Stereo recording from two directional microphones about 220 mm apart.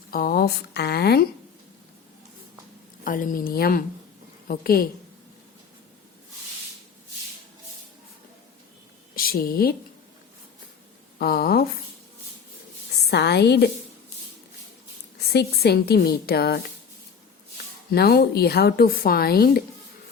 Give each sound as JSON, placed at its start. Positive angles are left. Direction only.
{"t": 0.1, "sound": "a woman's voice", "side_deg": 45}
{"t": 3.0, "sound": "a woman's voice", "side_deg": 40}
{"t": 9.1, "sound": "a woman's voice", "side_deg": 40}
{"t": 11.2, "sound": "a woman's voice", "side_deg": 45}
{"t": 13.0, "sound": "a woman's voice", "side_deg": 50}
{"t": 15.3, "sound": "a woman's voice", "side_deg": 45}
{"t": 17.9, "sound": "a woman's voice", "side_deg": 45}